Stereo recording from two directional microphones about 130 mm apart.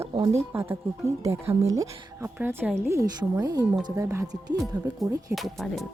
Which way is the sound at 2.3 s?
15° right (ahead or behind).